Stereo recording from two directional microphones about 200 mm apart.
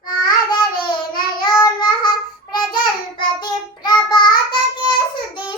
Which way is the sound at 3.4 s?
20° left (ahead or behind).